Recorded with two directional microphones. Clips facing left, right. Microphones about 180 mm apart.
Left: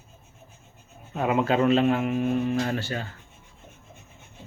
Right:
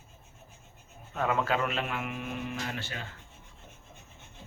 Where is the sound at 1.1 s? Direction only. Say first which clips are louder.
Left 6 dB; 20° left (ahead or behind); by 3.1 s 40° left (ahead or behind).